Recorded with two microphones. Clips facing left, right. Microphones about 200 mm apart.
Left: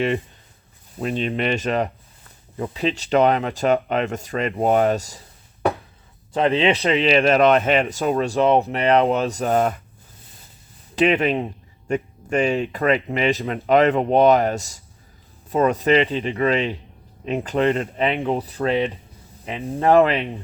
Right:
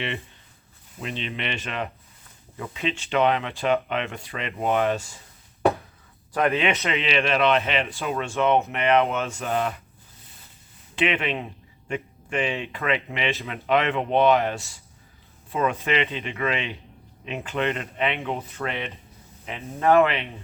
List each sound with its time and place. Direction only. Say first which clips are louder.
0.9 s speech: left 9 dB; 45° left (ahead or behind)
6.3 s speech: left 4 dB; 30° left (ahead or behind); by 9.7 s 45° left (ahead or behind)
10.9 s speech: left 7 dB; 40° left (ahead or behind)